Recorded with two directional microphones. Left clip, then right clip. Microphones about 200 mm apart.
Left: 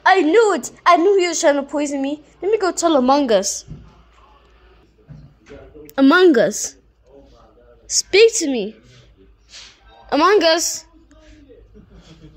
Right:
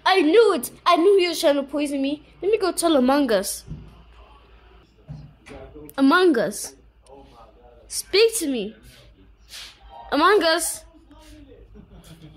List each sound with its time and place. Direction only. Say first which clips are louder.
0.0 s a woman's voice: left 3 dB; 10° left (ahead or behind)
5.9 s a woman's voice: left 5 dB; 20° left (ahead or behind)
7.8 s a woman's voice: left 6 dB; 15° left (ahead or behind)
10.0 s a woman's voice: left 4 dB; 15° left (ahead or behind)